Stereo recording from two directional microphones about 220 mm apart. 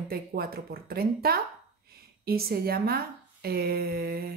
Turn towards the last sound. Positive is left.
turn(degrees=-45)  # may be behind; listen again after turning